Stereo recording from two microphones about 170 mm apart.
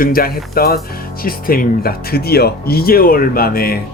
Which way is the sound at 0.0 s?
60° left (ahead or behind).